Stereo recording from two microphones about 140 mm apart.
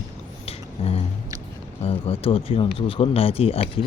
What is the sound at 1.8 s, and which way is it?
Speech, 45° left (ahead or behind).